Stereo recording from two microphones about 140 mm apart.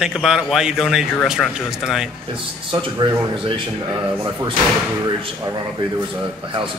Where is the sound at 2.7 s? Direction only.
35° right (ahead or behind).